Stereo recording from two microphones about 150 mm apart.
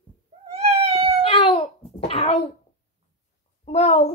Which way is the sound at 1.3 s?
40° left (ahead or behind).